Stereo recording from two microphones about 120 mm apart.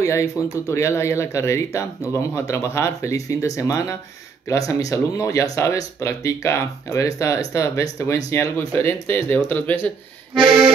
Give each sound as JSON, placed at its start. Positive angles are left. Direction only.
{"t": 0.0, "sound": "speech", "side_deg": 25}